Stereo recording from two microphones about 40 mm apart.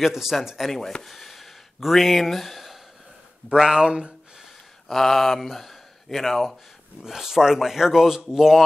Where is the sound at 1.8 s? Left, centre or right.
Centre.